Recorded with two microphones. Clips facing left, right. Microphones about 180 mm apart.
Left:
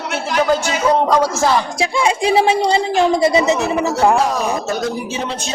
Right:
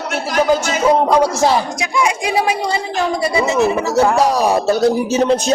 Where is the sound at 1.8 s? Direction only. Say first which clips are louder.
Left 2 dB; 30° left (ahead or behind).